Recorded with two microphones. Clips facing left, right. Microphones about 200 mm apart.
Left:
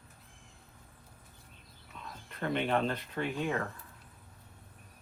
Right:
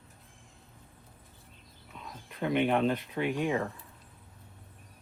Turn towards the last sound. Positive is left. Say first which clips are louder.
# right 4 dB
turn(degrees=-10)  # may be behind; listen again after turning